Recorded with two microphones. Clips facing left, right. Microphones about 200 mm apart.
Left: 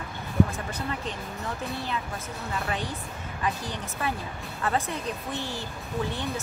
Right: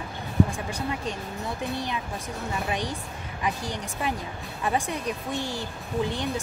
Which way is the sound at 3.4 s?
15° right (ahead or behind).